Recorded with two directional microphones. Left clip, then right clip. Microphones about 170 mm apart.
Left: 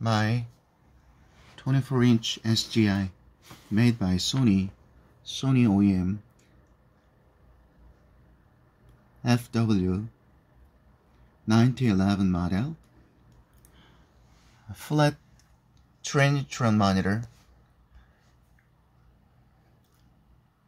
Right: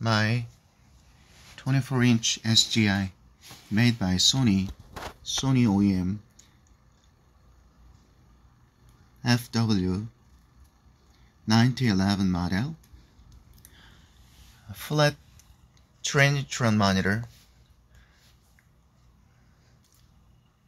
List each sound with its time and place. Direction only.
0.0 s speech: 5° left (ahead or behind)
1.6 s speech: centre (ahead or behind)
9.2 s speech: 5° left (ahead or behind)
11.4 s speech: 5° left (ahead or behind)
14.7 s speech: 5° left (ahead or behind)